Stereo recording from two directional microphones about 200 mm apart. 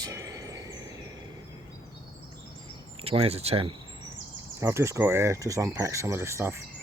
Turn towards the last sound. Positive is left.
turn(degrees=-15)  # may be behind; listen again after turning